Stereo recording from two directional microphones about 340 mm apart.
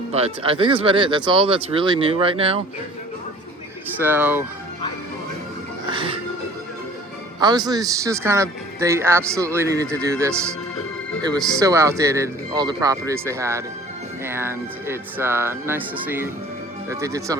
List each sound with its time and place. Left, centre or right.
0.1 s a man's voice: centre
3.9 s speech: centre
5.9 s a man's voice: centre
7.3 s a man's voice: centre